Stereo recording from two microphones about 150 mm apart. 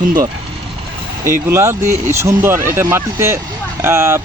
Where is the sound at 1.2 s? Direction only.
20° right (ahead or behind).